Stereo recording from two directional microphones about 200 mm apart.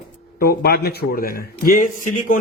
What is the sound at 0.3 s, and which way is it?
A man's voice, 50° left (ahead or behind).